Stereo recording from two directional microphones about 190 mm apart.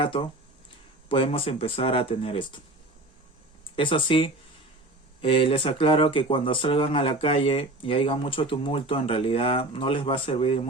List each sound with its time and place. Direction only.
0.0 s speech: 30° left (ahead or behind)
3.8 s speech: 25° left (ahead or behind)